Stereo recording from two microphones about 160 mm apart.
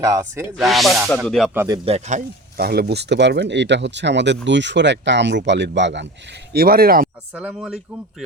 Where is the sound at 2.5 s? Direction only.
75° right (ahead or behind).